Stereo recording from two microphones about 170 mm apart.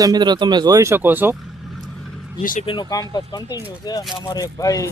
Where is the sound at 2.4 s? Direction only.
50° left (ahead or behind).